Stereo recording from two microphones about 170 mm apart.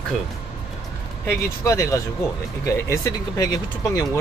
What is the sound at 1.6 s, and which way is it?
Speech, 20° left (ahead or behind).